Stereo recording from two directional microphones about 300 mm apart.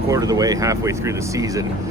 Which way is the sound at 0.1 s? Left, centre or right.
Centre.